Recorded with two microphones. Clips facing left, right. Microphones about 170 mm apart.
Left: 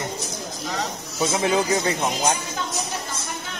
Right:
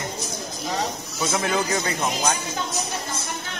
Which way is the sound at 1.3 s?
20° left (ahead or behind).